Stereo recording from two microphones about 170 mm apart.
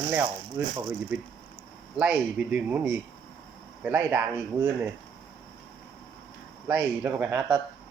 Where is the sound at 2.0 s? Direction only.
5° right (ahead or behind).